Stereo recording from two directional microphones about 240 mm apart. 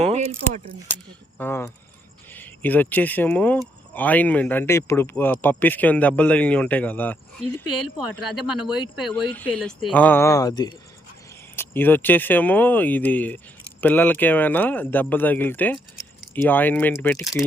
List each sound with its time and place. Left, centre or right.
0.0 s speech: right
1.4 s speech: centre